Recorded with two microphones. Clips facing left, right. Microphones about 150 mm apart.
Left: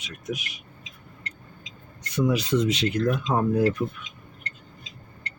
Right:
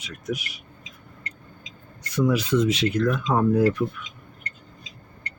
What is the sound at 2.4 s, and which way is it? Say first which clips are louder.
Speech: right 2 dB; 30° left (ahead or behind).